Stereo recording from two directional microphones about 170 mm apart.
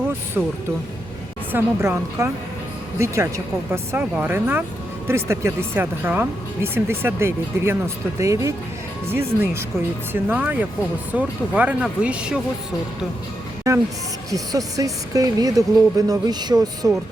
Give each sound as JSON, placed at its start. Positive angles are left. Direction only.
{"t": 0.4, "sound": "speech", "side_deg": -10}
{"t": 1.5, "sound": "speech", "side_deg": -15}
{"t": 13.7, "sound": "a woman's voice", "side_deg": -20}